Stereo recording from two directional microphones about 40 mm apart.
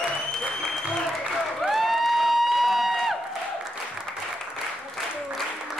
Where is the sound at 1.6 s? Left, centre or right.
Centre.